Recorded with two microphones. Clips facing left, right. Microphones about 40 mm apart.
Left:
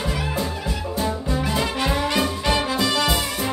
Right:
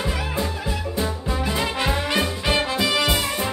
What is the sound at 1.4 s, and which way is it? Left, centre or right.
Music, centre.